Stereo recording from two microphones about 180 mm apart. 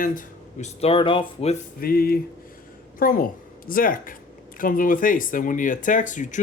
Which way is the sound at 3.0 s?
50° left (ahead or behind).